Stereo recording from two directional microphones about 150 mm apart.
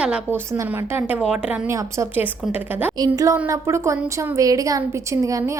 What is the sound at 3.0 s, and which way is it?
A woman's voice, 25° right (ahead or behind).